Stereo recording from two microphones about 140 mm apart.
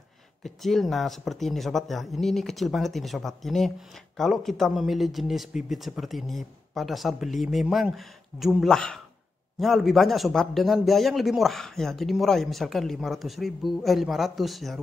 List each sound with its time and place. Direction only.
0.4 s a man's voice: centre (ahead or behind)